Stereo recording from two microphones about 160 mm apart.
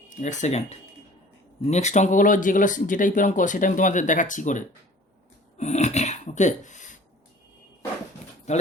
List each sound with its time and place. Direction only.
0.2 s speech: 50° left (ahead or behind)
8.5 s speech: 45° left (ahead or behind)